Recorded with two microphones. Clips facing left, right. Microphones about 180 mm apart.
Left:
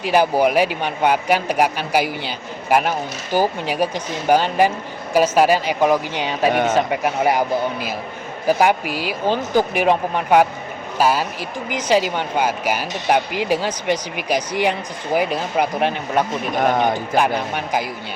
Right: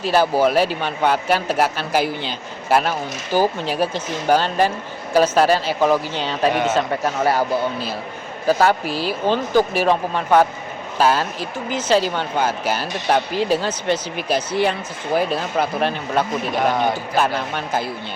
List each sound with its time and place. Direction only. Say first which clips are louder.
0.0 s speech: even; 15° left (ahead or behind)
16.6 s speech: left 2 dB; 55° left (ahead or behind)
16.9 s speech: left 2 dB; 15° left (ahead or behind)